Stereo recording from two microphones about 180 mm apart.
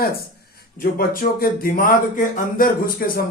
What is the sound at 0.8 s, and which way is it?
Speech, 55° left (ahead or behind).